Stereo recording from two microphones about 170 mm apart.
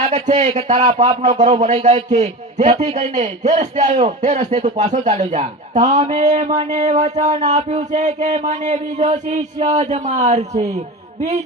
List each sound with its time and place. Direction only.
0.0 s a man's voice: 45° right (ahead or behind)